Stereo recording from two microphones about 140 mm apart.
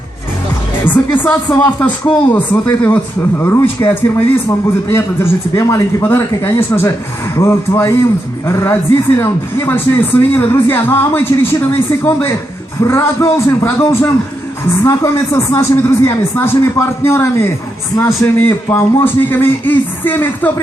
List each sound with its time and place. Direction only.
0.9 s a man's voice: 15° left (ahead or behind)